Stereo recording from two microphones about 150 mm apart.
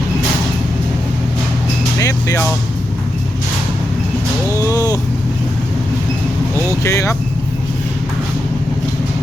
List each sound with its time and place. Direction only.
2.0 s music: 20° left (ahead or behind)
4.5 s vehicle: 20° left (ahead or behind)
6.8 s speech: 20° left (ahead or behind)